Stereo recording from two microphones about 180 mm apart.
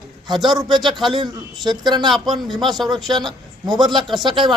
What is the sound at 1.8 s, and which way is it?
Speech, 25° right (ahead or behind).